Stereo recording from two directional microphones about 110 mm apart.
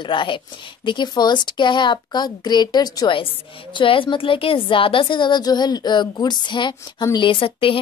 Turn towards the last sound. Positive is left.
turn(degrees=55)  # may be behind; listen again after turning